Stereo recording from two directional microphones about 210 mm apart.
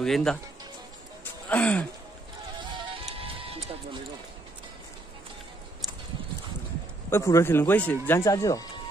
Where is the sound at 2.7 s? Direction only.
25° right (ahead or behind).